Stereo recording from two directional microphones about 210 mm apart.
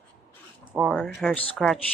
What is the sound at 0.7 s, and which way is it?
Speech, centre (ahead or behind).